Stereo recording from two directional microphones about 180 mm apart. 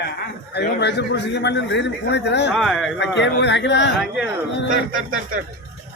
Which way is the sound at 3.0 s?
80° left.